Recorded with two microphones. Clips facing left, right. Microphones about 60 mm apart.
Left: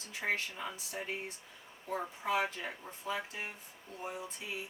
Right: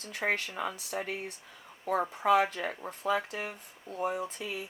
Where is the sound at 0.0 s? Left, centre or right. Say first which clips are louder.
Right 4 dB; right.